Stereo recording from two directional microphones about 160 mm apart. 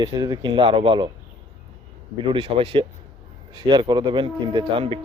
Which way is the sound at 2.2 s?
35° right (ahead or behind).